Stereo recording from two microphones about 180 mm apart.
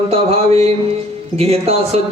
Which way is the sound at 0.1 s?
35° right (ahead or behind).